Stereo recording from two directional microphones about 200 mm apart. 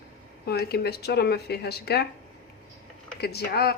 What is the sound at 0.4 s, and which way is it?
Speech, 55° left (ahead or behind).